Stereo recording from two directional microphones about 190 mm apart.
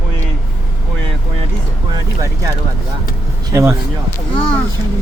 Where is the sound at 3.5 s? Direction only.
15° right (ahead or behind).